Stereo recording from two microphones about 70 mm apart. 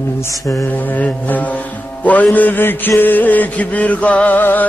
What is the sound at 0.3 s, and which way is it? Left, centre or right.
Mantra, left.